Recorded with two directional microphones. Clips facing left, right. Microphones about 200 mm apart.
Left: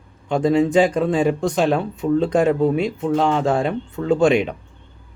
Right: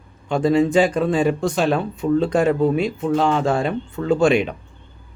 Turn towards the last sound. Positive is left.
turn(degrees=20)  # may be behind; listen again after turning